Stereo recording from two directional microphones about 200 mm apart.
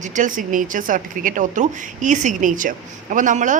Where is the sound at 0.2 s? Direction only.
40° right (ahead or behind).